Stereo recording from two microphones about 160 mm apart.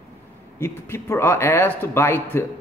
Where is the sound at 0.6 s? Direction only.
15° left (ahead or behind).